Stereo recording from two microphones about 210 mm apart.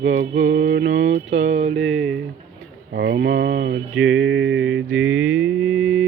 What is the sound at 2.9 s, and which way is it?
Mantra, 45° right (ahead or behind).